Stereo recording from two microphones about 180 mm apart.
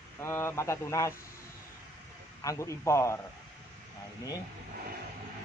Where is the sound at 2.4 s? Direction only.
15° left (ahead or behind).